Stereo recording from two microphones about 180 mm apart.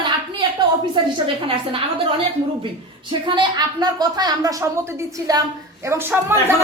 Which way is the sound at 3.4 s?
20° right (ahead or behind).